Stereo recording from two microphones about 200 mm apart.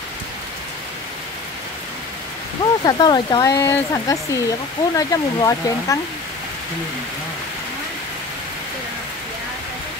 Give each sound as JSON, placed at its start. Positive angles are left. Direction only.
{"t": 2.6, "sound": "speech", "side_deg": 20}